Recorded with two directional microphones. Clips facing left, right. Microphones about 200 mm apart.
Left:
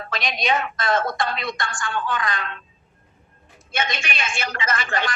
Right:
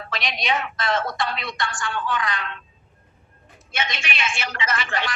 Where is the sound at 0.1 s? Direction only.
45° left (ahead or behind).